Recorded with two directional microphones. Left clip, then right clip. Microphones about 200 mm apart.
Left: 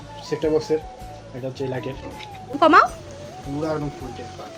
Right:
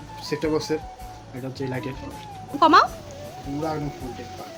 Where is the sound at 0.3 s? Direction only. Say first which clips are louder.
Left 2 dB; 30° right (ahead or behind).